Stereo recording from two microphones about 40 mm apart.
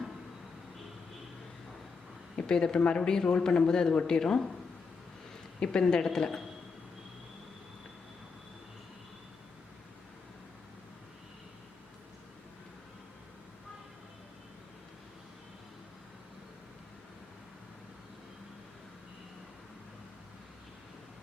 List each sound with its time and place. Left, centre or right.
2.3 s speech: left
5.5 s speech: left